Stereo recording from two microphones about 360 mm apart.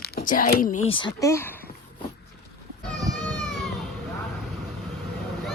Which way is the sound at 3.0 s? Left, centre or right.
Centre.